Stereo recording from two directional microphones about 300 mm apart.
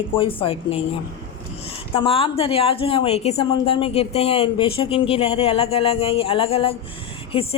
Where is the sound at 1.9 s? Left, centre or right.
Centre.